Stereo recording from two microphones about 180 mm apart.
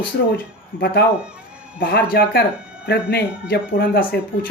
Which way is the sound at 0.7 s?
55° left (ahead or behind).